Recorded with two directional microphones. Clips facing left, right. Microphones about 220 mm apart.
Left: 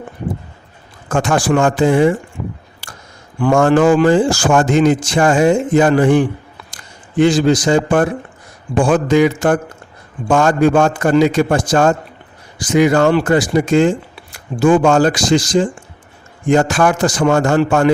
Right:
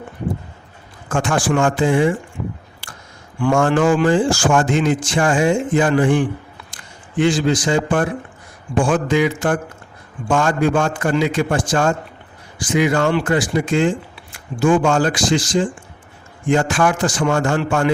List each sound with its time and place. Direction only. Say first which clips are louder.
1.0 s a man's voice: left 3 dB; 40° left (ahead or behind)
3.4 s a man's voice: left 4 dB; 40° left (ahead or behind)
8.8 s a man's voice: left 5 dB; 40° left (ahead or behind)